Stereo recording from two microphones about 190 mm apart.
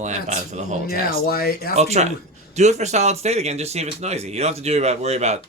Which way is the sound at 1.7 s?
35° right (ahead or behind).